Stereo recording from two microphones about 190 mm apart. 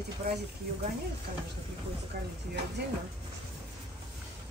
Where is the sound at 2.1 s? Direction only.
55° right (ahead or behind).